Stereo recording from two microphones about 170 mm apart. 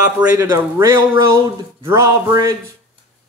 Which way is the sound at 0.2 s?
15° right (ahead or behind).